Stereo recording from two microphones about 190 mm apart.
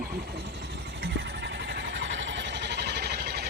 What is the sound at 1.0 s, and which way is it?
Vehicle, 65° right (ahead or behind).